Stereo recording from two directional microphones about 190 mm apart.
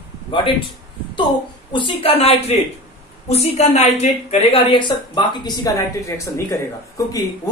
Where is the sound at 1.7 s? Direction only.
25° left (ahead or behind).